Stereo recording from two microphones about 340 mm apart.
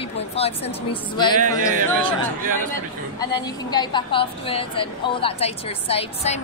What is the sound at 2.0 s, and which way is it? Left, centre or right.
Speech, right.